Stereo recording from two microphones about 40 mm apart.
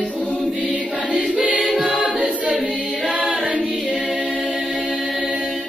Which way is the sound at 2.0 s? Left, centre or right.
Right.